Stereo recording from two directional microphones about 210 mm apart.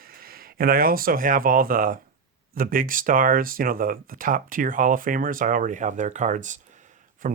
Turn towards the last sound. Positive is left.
turn(degrees=-40)  # may be behind; listen again after turning